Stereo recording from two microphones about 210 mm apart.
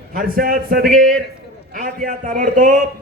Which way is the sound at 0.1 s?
45° right (ahead or behind).